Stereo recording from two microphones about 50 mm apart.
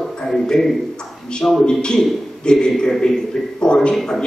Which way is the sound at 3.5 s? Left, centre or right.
Centre.